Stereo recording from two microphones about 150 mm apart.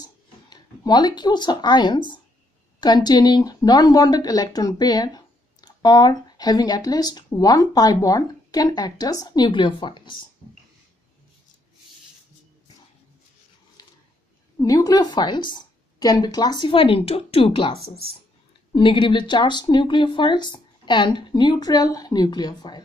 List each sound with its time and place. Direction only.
0.0 s speech: 25° left (ahead or behind)
14.6 s a woman's voice: 25° left (ahead or behind)